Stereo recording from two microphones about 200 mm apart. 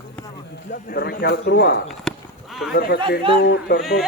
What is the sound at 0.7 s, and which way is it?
Speech, 50° left (ahead or behind).